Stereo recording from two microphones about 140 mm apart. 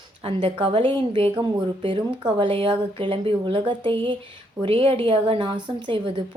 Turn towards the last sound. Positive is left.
turn(degrees=-40)  # may be behind; listen again after turning